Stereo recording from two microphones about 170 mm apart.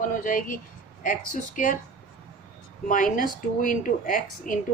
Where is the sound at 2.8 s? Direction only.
50° left (ahead or behind).